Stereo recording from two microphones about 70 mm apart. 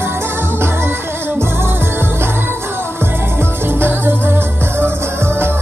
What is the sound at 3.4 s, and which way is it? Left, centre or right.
Music, right.